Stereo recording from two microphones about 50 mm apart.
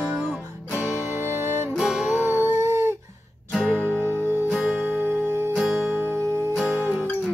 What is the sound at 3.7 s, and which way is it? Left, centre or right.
Music, left.